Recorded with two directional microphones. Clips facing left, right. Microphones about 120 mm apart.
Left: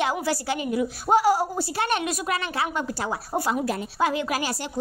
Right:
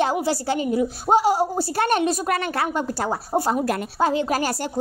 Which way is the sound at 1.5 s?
40° right (ahead or behind).